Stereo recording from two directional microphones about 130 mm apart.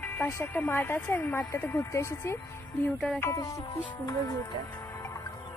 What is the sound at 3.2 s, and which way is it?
Music, 25° left (ahead or behind).